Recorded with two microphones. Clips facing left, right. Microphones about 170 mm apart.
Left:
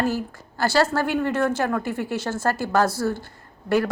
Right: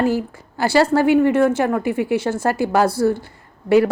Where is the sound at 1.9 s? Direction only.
65° right (ahead or behind).